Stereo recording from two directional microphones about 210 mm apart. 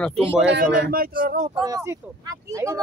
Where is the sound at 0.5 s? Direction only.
45° right (ahead or behind).